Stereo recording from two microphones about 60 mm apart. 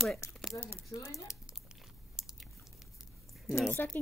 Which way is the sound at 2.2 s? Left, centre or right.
Centre.